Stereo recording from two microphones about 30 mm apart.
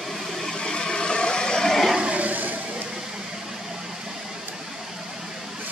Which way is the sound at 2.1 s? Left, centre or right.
Right.